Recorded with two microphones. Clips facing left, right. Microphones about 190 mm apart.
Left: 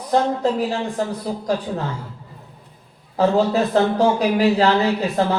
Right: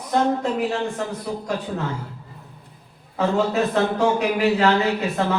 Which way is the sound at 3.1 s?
35° left (ahead or behind).